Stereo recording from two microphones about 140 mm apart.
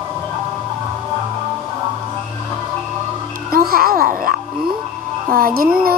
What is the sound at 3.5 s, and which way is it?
Music, 90° right.